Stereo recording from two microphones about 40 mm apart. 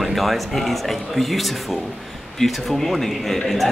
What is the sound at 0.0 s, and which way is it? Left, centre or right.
Speech, centre.